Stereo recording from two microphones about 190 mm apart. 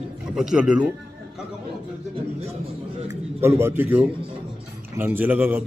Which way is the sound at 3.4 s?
15° right (ahead or behind).